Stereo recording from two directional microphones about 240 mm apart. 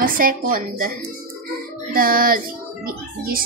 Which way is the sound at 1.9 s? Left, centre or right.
Right.